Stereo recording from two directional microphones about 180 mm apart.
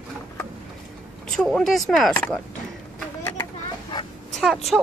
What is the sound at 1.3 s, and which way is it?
Speech, centre (ahead or behind).